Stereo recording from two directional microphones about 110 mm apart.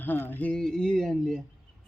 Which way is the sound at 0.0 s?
15° left (ahead or behind).